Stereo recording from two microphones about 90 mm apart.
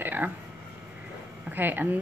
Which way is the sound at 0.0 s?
20° right (ahead or behind).